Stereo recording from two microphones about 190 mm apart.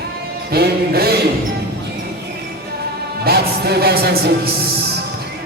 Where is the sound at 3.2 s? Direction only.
55° right (ahead or behind).